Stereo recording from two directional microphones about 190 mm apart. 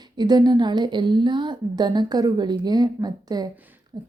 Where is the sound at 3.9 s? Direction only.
20° right (ahead or behind).